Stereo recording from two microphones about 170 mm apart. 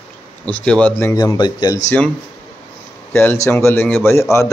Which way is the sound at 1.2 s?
25° left (ahead or behind).